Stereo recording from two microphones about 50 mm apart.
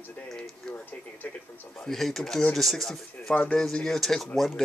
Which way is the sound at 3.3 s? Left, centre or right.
Left.